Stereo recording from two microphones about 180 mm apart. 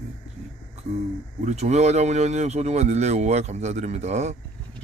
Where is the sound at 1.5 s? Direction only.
40° right (ahead or behind).